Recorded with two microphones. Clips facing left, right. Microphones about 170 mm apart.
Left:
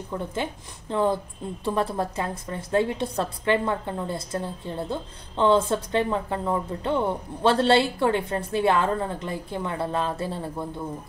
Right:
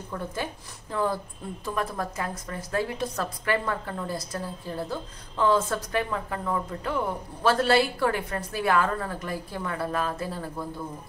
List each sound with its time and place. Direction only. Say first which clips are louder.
0.1 s a woman's voice: left 3 dB; 25° left (ahead or behind)